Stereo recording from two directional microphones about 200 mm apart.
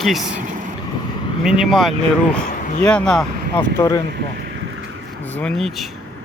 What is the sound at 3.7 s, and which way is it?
Speech, 15° left (ahead or behind).